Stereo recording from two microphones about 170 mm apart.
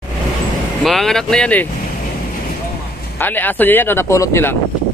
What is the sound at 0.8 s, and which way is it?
Speech, centre (ahead or behind).